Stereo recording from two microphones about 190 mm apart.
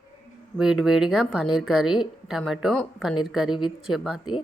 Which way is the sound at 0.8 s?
Centre (ahead or behind).